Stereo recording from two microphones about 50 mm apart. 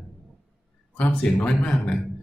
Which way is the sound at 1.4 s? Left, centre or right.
Centre.